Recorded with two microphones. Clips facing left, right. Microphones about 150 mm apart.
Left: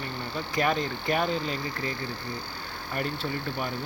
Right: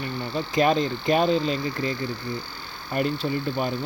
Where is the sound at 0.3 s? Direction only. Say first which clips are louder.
Right 6 dB; 25° right (ahead or behind).